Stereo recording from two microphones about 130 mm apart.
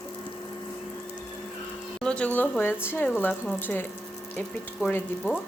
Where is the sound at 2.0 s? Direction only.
10° left (ahead or behind).